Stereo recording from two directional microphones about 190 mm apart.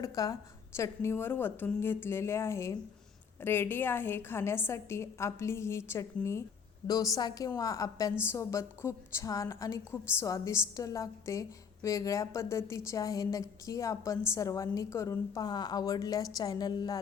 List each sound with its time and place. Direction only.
0.0 s a woman's voice: 20° left (ahead or behind)